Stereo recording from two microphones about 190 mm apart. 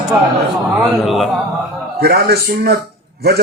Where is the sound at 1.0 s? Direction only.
Centre (ahead or behind).